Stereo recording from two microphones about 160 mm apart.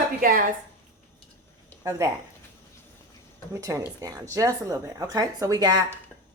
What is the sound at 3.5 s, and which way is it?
Speech, 20° right (ahead or behind).